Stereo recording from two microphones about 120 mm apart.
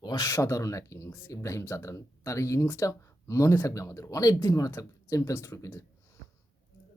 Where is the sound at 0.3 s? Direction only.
25° left (ahead or behind).